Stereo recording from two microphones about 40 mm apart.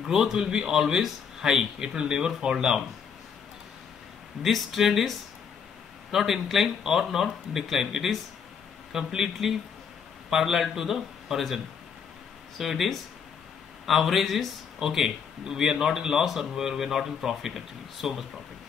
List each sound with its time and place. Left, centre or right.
0.1 s a man's voice: centre
4.4 s speech: centre
6.1 s a man's voice: centre
14.8 s a man's voice: centre